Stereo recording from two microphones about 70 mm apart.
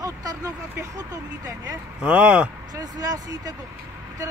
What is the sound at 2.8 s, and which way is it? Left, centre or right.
Speech, right.